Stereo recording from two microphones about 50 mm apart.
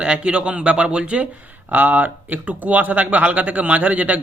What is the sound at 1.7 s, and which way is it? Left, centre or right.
A man's voice, right.